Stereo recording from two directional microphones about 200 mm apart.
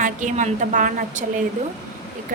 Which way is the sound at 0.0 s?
40° right (ahead or behind).